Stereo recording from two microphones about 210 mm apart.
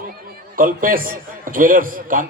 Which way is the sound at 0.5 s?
40° right (ahead or behind).